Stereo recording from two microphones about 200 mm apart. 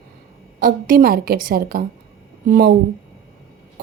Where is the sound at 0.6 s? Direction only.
45° right (ahead or behind).